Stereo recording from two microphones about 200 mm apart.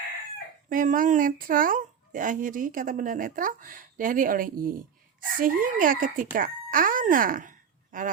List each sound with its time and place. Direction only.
0.7 s speech: 45° right (ahead or behind)